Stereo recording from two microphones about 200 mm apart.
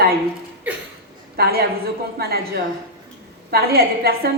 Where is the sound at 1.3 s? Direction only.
50° right (ahead or behind).